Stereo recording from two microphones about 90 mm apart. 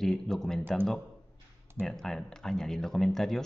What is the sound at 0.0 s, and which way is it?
Speech, 5° left (ahead or behind).